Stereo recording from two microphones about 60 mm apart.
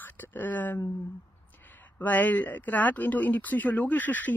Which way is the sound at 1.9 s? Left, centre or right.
Left.